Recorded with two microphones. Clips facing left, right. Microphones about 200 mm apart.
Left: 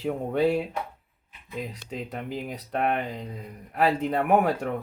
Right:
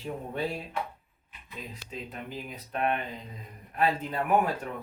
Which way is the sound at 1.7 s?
70° left (ahead or behind).